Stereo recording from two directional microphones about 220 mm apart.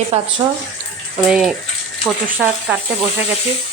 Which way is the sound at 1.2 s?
Centre (ahead or behind).